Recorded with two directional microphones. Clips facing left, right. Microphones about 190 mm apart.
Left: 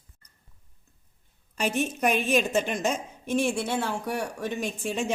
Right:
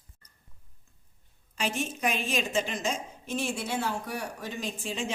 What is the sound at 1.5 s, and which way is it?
A woman's voice, 55° left (ahead or behind).